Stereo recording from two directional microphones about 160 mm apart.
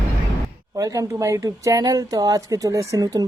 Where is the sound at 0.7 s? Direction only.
20° right (ahead or behind).